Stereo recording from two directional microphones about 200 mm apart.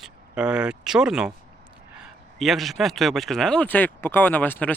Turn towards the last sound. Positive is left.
turn(degrees=10)  # may be behind; listen again after turning